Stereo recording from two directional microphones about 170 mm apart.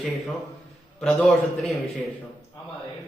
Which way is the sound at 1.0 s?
Centre (ahead or behind).